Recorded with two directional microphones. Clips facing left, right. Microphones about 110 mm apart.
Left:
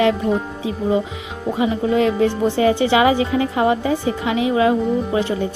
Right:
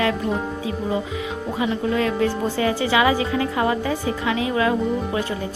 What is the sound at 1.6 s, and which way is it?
A woman's voice, 25° left (ahead or behind).